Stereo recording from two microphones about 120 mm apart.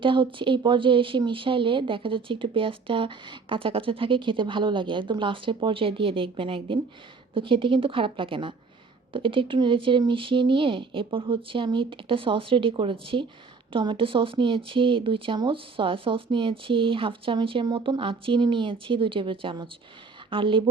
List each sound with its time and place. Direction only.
0.0 s speech: 45° right (ahead or behind)